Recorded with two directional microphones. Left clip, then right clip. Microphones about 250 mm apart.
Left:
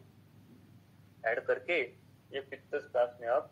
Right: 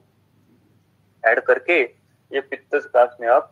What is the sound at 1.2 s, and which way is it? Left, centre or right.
Speech, right.